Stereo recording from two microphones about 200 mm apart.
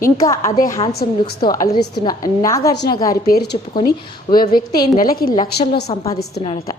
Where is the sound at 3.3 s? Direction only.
50° left (ahead or behind).